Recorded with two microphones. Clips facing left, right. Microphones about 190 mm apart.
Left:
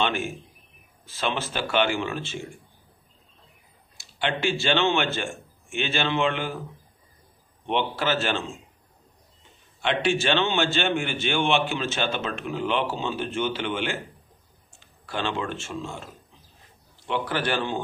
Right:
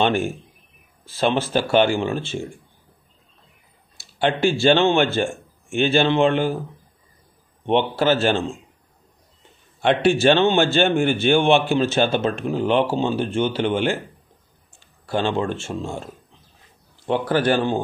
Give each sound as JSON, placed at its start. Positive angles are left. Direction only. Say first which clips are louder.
{"t": 0.0, "sound": "a man's voice", "louder": "right 6 dB", "side_deg": -35}
{"t": 4.0, "sound": "speech", "louder": "right 7 dB", "side_deg": -35}
{"t": 7.6, "sound": "a man's voice", "louder": "right 7 dB", "side_deg": -35}
{"t": 9.8, "sound": "a man's voice", "louder": "right 7 dB", "side_deg": -40}
{"t": 15.0, "sound": "a man's voice", "louder": "right 7 dB", "side_deg": -35}
{"t": 17.1, "sound": "speech", "louder": "right 7 dB", "side_deg": -40}